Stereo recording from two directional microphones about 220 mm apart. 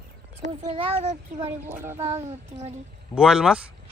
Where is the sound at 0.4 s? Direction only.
30° right (ahead or behind).